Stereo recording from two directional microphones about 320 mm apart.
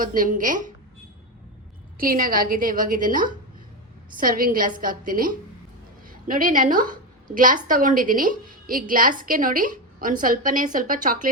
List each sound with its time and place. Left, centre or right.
0.0 s a woman's voice: right
2.0 s a woman's voice: right